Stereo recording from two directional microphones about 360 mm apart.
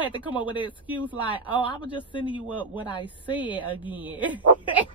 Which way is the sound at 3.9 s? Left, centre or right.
Centre.